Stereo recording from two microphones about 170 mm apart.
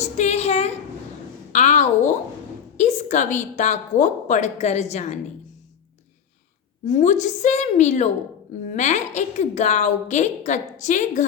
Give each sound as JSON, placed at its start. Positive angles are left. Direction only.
{"t": 0.0, "sound": "a sound", "side_deg": 40}
{"t": 2.7, "sound": "a woman's voice", "side_deg": 45}
{"t": 6.8, "sound": "a woman's voice", "side_deg": 45}